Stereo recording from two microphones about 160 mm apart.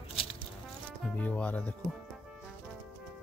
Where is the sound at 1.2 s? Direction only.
10° left (ahead or behind).